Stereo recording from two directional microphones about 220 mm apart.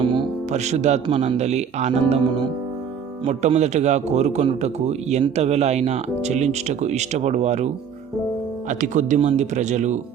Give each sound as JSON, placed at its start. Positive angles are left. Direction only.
{"t": 0.0, "sound": "a man's voice", "side_deg": -25}
{"t": 8.8, "sound": "a man's voice", "side_deg": -35}